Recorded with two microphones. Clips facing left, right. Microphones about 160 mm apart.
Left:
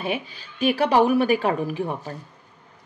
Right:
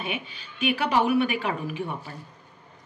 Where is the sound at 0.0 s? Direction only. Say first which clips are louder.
Left 5 dB; 35° left (ahead or behind).